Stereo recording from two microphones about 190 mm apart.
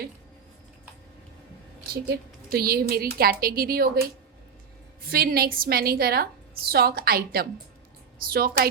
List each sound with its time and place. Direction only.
1.9 s speech: 55° right (ahead or behind)
5.0 s speech: 50° right (ahead or behind)